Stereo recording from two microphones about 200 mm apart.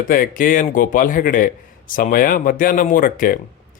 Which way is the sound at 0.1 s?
45° left (ahead or behind).